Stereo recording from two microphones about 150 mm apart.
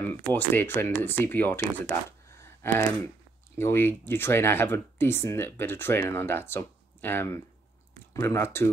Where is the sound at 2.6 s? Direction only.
15° left (ahead or behind).